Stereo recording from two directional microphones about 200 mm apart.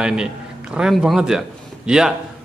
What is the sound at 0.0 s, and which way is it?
A man's voice, 5° right (ahead or behind).